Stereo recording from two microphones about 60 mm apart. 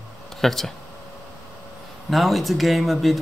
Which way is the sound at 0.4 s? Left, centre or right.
Centre.